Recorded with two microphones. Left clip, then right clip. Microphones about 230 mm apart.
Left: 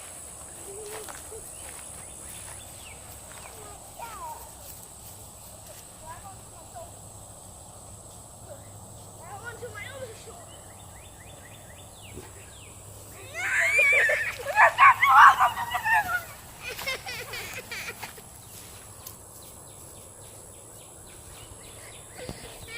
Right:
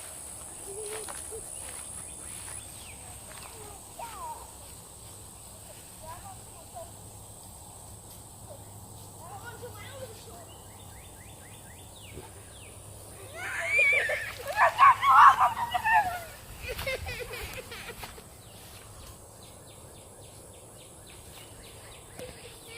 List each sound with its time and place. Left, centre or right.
0.9 s hoot: centre
13.3 s a sound: centre; by 16.1 s left
16.6 s vehicle: left